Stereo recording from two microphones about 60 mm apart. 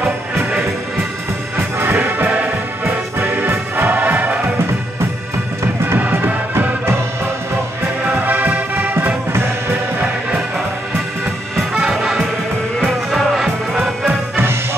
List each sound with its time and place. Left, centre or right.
1.8 s music: right
5.9 s music: right
8.1 s music: right
8.9 s music: right
11.7 s music: centre
14.3 s music: right